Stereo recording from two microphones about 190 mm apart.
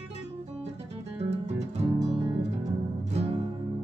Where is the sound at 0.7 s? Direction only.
35° right (ahead or behind).